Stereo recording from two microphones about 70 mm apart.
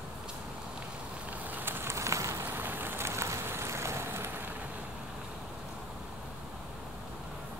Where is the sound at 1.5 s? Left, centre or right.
Right.